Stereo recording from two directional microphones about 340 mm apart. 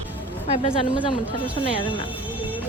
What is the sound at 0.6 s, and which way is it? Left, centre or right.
Speech, centre.